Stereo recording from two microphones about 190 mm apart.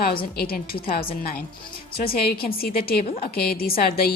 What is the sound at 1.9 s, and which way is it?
A woman's voice, 55° left (ahead or behind).